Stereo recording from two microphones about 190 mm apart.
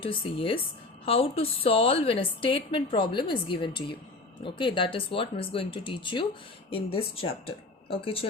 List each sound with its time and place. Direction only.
0.0 s a woman's voice: 30° left (ahead or behind)